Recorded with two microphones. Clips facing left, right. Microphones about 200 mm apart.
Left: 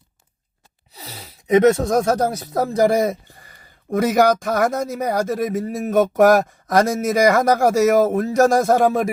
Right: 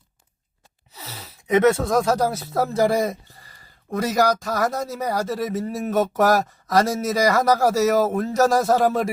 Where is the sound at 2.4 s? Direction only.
40° left (ahead or behind).